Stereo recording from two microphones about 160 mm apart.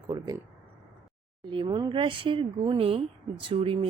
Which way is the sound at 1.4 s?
30° right (ahead or behind).